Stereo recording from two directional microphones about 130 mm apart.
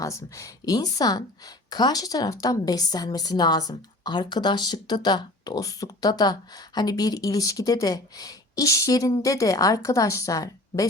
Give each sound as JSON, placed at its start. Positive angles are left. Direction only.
{"t": 0.0, "sound": "a woman's voice", "side_deg": 25}